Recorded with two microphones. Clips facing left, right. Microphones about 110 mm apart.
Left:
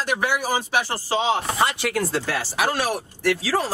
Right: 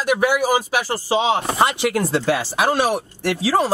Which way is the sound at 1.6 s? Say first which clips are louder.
Right 5 dB; 20° right (ahead or behind).